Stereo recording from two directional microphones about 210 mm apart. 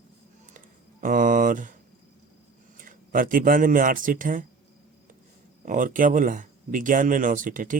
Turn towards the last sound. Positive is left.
turn(degrees=-40)  # may be behind; listen again after turning